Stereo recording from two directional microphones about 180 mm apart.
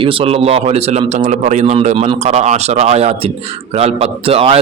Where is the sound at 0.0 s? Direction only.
30° right (ahead or behind).